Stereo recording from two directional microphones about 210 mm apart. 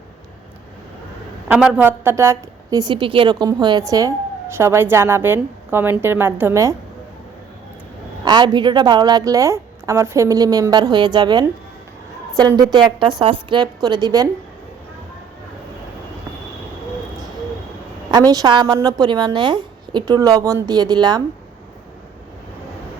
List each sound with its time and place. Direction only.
1.5 s a woman's voice: 5° right (ahead or behind)
8.2 s a woman's voice: 20° right (ahead or behind)
18.1 s a woman's voice: 20° right (ahead or behind)